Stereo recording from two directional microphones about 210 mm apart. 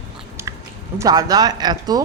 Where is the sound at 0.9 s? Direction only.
15° right (ahead or behind).